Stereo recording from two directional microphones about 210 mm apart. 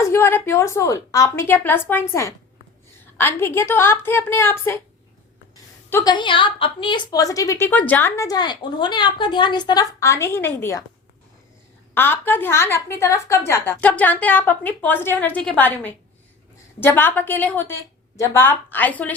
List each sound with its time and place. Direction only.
0.1 s a woman's voice: 10° left (ahead or behind)
5.9 s a woman's voice: 15° left (ahead or behind)
11.9 s a woman's voice: 10° left (ahead or behind)